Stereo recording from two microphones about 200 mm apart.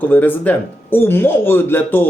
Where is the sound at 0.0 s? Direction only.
10° left (ahead or behind).